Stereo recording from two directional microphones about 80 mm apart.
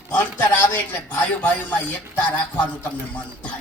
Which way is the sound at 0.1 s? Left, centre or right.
Left.